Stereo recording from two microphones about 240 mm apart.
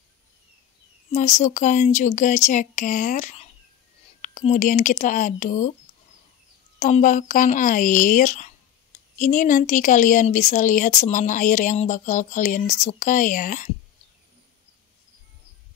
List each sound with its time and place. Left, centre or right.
1.1 s speech: left
6.8 s speech: left